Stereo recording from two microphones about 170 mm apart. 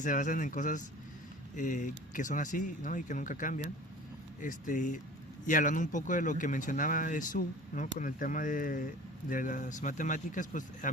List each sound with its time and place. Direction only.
0.0 s speech: 50° left (ahead or behind)